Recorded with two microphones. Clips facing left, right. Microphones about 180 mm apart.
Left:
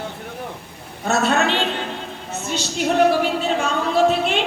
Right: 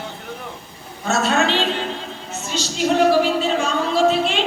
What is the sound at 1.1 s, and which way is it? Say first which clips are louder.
Speech: even; 60° left (ahead or behind).